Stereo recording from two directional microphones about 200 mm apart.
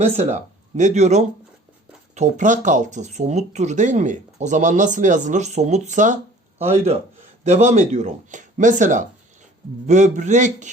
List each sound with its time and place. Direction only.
0.0 s speech: 35° right (ahead or behind)